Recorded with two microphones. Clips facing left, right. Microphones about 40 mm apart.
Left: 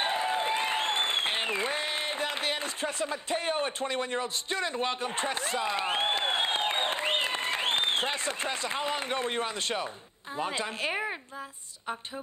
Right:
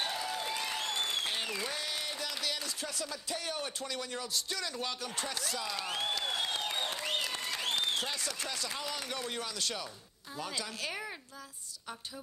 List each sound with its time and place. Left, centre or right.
0.0 s applause: left
10.3 s a woman's voice: left